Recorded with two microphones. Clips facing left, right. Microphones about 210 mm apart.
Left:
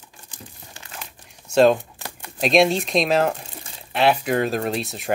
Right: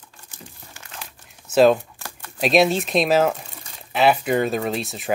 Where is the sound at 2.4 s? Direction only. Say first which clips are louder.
Even; centre (ahead or behind).